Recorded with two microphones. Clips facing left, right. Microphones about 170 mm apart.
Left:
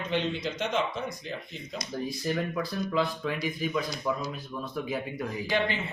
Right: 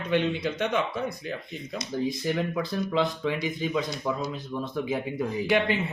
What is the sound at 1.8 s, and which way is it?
Speech, 20° right (ahead or behind).